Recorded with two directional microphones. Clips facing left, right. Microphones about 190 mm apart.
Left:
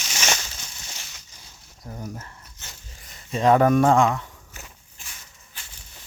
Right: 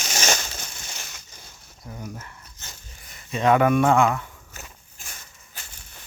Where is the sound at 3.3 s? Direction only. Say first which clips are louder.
Left 1 dB; 35° left (ahead or behind).